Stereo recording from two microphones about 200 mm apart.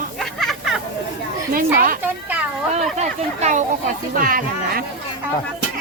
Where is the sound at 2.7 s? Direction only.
35° right (ahead or behind).